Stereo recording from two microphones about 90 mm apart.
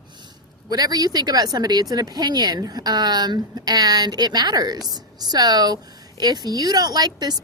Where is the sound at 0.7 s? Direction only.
45° right (ahead or behind).